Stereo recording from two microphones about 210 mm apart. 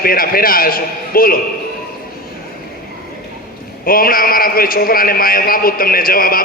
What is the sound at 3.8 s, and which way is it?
A man's voice, 45° left (ahead or behind).